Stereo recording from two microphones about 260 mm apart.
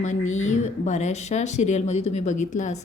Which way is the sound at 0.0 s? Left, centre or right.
Left.